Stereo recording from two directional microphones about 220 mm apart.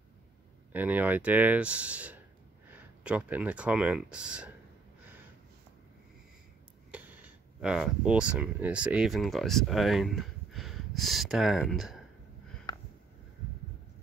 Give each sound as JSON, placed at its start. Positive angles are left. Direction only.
{"t": 0.7, "sound": "speech", "side_deg": -5}
{"t": 6.9, "sound": "speech", "side_deg": -5}
{"t": 12.7, "sound": "a sound", "side_deg": 15}